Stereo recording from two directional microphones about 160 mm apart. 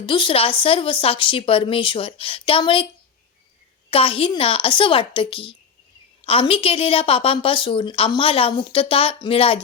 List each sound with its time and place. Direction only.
0.0 s a woman's voice: 30° left (ahead or behind)
3.8 s a woman's voice: 35° left (ahead or behind)